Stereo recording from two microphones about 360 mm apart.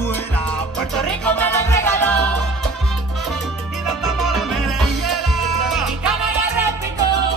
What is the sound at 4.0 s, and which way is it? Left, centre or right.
Music, centre.